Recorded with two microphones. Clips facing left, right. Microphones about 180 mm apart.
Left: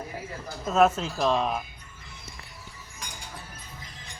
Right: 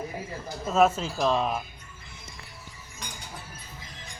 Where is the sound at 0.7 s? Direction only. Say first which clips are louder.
Left 1 dB; centre (ahead or behind).